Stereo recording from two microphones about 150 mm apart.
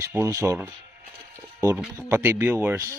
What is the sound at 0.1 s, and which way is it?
Speech, 20° right (ahead or behind).